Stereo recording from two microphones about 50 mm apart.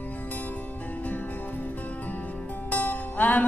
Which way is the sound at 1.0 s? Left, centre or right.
Left.